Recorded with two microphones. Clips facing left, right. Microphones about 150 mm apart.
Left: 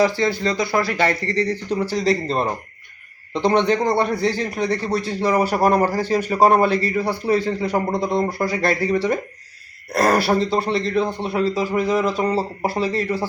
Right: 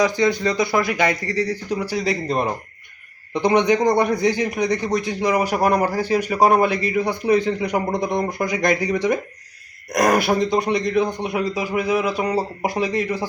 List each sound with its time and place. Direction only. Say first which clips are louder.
0.0 s speech: even; 15° right (ahead or behind)